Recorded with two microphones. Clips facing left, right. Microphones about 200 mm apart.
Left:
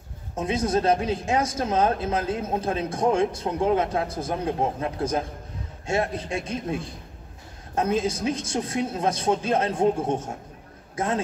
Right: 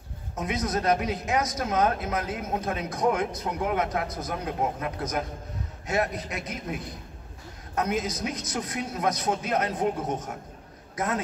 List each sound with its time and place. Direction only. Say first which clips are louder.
0.4 s speech: left 5 dB; 30° left (ahead or behind)